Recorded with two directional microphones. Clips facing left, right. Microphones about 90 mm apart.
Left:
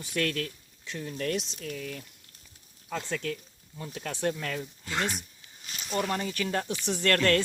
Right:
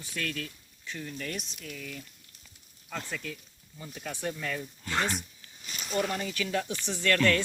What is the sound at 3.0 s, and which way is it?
Speech, 75° left (ahead or behind).